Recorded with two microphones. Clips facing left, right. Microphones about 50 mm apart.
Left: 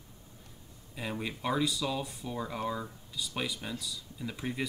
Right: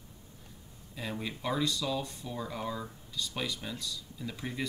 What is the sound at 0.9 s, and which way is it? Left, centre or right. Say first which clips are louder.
Speech: left 1 dB; centre.